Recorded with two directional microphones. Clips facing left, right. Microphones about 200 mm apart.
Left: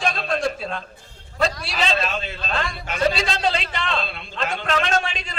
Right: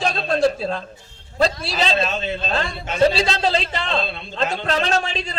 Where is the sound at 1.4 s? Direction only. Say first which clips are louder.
Right 3 dB; 30° right (ahead or behind).